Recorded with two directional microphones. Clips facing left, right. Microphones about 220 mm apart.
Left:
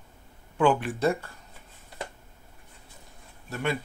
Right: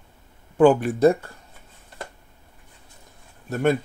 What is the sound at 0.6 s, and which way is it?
Speech, 45° right (ahead or behind).